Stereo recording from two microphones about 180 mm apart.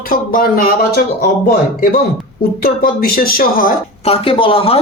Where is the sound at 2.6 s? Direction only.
55° left (ahead or behind).